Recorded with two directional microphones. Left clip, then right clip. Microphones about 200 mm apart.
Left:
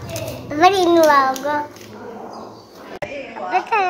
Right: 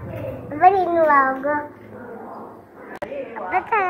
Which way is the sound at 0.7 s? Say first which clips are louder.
Left 2 dB; 60° left (ahead or behind).